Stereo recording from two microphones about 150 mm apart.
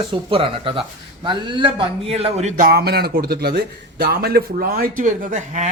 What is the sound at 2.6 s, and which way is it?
A man's voice, 85° right.